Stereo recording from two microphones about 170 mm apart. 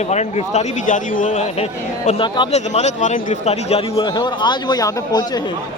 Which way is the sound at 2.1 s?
30° left (ahead or behind).